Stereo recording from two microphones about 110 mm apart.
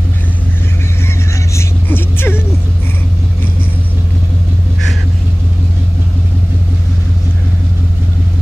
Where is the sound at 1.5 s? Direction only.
20° left (ahead or behind).